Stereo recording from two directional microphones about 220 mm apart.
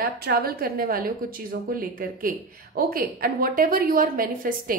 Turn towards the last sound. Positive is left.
turn(degrees=-40)  # may be behind; listen again after turning